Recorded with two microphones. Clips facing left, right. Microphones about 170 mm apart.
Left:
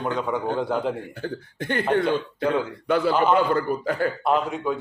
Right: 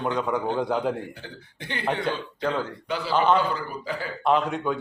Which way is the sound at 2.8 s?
55° left (ahead or behind).